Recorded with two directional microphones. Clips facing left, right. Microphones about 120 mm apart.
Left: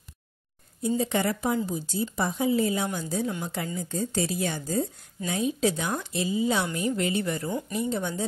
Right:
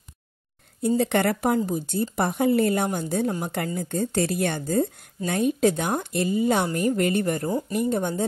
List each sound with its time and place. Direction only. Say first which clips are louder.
0.8 s a woman's voice: right 4 dB; 65° right (ahead or behind)